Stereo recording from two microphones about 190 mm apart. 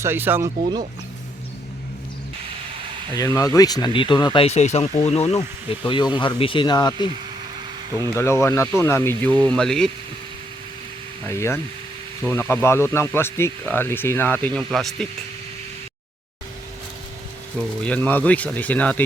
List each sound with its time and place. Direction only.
0.0 s speech: 10° right (ahead or behind)
3.2 s speech: 15° left (ahead or behind)
4.4 s speech: 35° left (ahead or behind); by 9.9 s 5° left (ahead or behind)
11.3 s speech: 15° left (ahead or behind)
17.8 s speech: 10° left (ahead or behind)